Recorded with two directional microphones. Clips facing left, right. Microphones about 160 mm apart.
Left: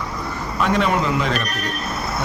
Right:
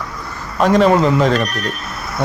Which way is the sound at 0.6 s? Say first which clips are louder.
Right 8 dB; 35° right (ahead or behind).